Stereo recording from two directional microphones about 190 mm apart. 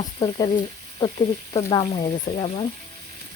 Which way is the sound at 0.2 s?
20° left (ahead or behind).